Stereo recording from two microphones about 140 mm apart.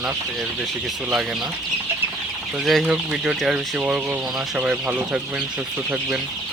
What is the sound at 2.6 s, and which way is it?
Speech, 5° right (ahead or behind).